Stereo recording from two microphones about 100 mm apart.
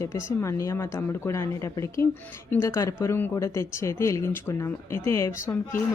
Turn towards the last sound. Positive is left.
turn(degrees=25)  # may be behind; listen again after turning